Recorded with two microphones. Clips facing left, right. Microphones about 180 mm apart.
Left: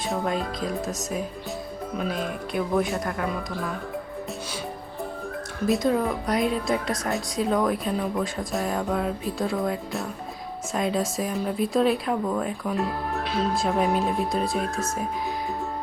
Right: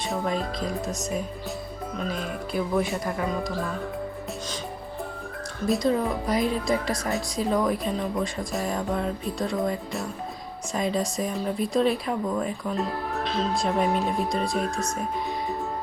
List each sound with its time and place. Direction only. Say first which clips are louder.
0.1 s speech: left 1 dB; centre (ahead or behind)
5.6 s speech: left 1 dB; centre (ahead or behind)